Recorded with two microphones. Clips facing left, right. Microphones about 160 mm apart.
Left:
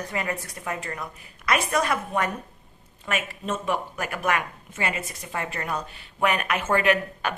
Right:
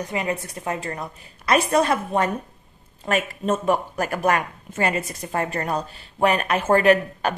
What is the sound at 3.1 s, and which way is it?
A woman's voice, 40° right (ahead or behind).